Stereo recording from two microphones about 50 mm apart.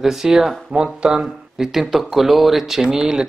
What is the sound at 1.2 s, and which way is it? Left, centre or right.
Speech, centre.